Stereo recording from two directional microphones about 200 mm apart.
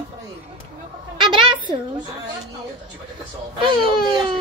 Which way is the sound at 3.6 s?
25° right (ahead or behind).